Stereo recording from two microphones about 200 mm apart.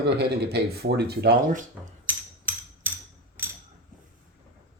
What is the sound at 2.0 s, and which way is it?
Hammer, 10° right (ahead or behind).